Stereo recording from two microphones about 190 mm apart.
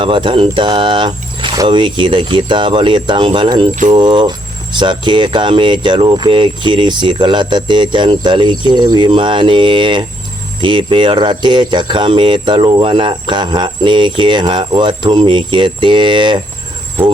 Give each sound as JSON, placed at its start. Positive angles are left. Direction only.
{"t": 0.0, "sound": "cricket", "side_deg": -25}